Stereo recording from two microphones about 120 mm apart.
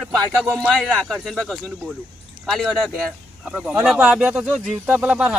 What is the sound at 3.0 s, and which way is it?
Speech, 5° right (ahead or behind).